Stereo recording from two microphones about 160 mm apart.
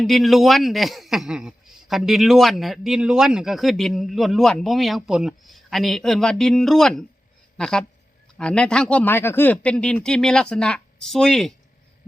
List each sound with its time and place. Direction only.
0.0 s a man's voice: centre (ahead or behind)